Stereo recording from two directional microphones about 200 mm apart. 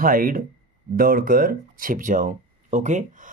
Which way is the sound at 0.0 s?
45° right (ahead or behind).